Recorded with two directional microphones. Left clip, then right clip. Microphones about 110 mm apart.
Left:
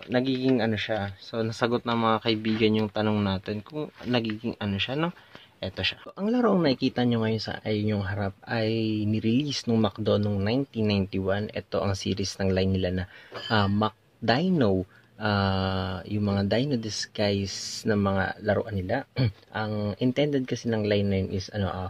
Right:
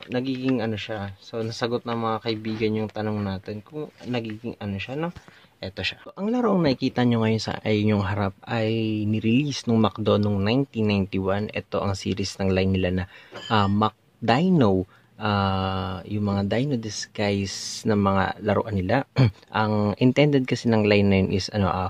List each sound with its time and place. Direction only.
0.1 s speech: 20° left (ahead or behind); by 7.0 s 10° right (ahead or behind)
7.0 s speech: 25° right (ahead or behind)
8.5 s speech: 15° right (ahead or behind)
15.2 s speech: 10° right (ahead or behind)
18.6 s speech: 35° right (ahead or behind)
20.2 s speech: 30° right (ahead or behind)
21.1 s speech: 45° right (ahead or behind)